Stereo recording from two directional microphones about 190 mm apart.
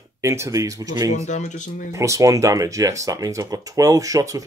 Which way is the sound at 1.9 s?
15° right (ahead or behind).